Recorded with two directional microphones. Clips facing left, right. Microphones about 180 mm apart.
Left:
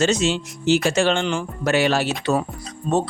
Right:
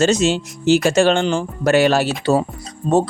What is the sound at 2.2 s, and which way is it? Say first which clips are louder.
Speech: right 4 dB; 30° right (ahead or behind).